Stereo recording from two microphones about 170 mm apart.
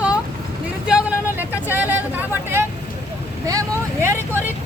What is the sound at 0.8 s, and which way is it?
Vehicle, 10° right (ahead or behind).